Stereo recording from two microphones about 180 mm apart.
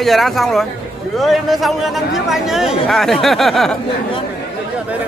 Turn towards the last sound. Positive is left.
turn(degrees=0)  # may be behind; listen again after turning